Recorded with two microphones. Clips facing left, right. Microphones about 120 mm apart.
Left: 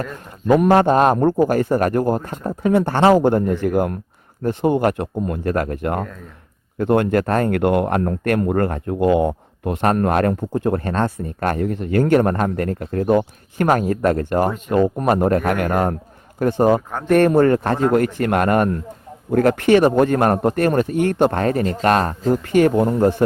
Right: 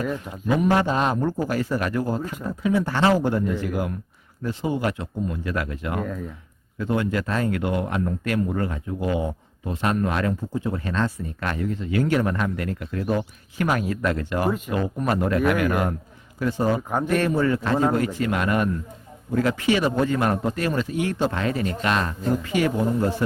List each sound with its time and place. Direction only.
0.7 s a man's voice: 50° left (ahead or behind)
6.7 s a man's voice: 60° left (ahead or behind)